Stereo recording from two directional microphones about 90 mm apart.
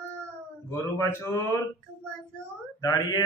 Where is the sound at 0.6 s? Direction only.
30° left (ahead or behind).